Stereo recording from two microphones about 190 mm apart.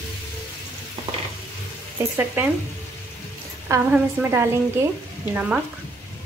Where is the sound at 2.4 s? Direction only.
10° right (ahead or behind).